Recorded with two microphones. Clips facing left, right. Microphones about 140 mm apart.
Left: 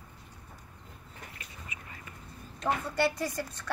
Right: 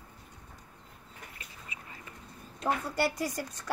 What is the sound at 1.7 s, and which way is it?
Duck, 30° right (ahead or behind).